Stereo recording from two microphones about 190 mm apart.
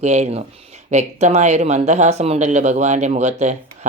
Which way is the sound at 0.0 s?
35° right (ahead or behind).